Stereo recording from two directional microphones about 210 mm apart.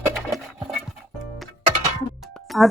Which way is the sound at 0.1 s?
Centre (ahead or behind).